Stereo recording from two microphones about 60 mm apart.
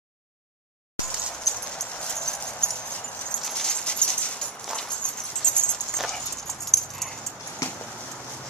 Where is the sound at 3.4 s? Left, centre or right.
Centre.